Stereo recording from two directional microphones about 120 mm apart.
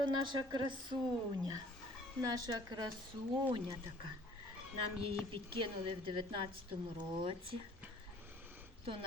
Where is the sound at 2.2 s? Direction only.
35° right (ahead or behind).